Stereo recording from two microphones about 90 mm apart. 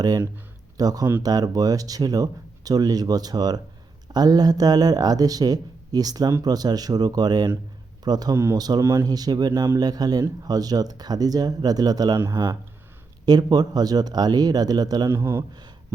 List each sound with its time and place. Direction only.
0.8 s speech: 45° right (ahead or behind)
8.8 s a man's voice: 30° right (ahead or behind)
9.0 s speech: 45° right (ahead or behind)
15.1 s a man's voice: 30° right (ahead or behind)